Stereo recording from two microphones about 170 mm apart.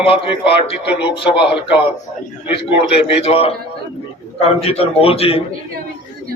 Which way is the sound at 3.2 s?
35° left (ahead or behind).